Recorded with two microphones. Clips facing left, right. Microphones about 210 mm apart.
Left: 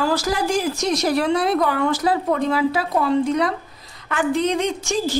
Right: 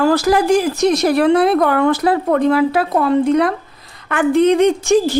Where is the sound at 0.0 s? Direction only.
60° right (ahead or behind).